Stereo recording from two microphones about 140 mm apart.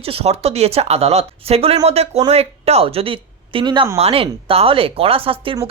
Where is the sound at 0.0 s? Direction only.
45° right (ahead or behind).